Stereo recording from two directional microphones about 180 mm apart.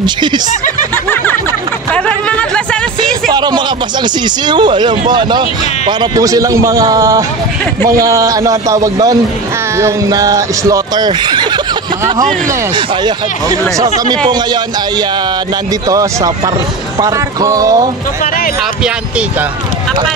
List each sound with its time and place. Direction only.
0.0 s speech: 25° right (ahead or behind)
2.0 s speech: 5° left (ahead or behind)
3.3 s speech: 25° right (ahead or behind)